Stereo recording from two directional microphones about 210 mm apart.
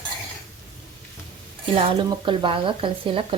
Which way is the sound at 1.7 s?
30° right (ahead or behind).